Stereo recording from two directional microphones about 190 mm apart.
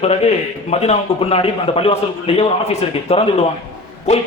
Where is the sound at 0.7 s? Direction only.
35° left (ahead or behind).